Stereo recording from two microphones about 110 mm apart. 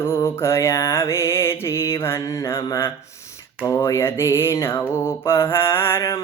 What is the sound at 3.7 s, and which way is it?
Mantra, 25° left (ahead or behind).